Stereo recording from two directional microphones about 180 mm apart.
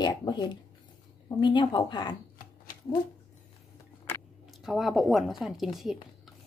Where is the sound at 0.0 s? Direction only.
25° left (ahead or behind).